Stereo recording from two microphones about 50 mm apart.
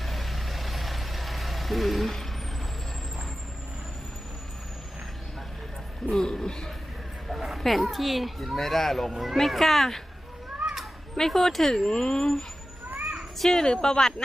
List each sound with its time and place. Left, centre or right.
0.0 s vehicle: centre
6.1 s music: centre
7.3 s a sound: centre
7.9 s a child's voice: centre
11.2 s speech: centre
12.9 s children playing: right
13.4 s speech: centre